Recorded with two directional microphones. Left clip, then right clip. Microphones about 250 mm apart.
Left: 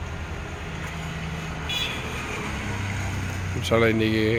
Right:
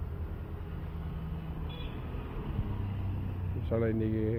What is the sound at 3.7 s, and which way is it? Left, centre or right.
Speech, centre.